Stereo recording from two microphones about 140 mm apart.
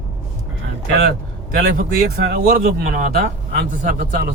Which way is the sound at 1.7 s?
90° right.